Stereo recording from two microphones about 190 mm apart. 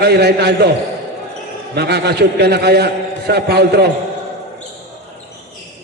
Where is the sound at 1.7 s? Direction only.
60° right (ahead or behind).